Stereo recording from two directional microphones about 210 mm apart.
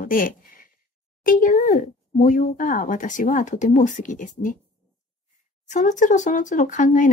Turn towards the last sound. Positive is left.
turn(degrees=35)  # may be behind; listen again after turning